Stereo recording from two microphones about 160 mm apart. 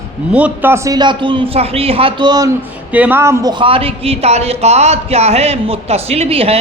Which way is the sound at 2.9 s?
10° right (ahead or behind).